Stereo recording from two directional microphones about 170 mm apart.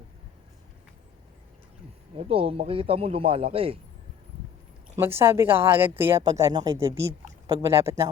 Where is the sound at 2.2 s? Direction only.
35° right (ahead or behind).